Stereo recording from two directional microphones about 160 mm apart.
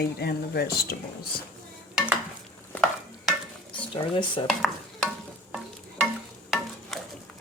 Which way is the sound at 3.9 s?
30° left (ahead or behind).